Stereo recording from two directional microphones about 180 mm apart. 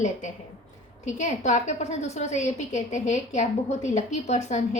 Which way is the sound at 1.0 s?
40° left (ahead or behind).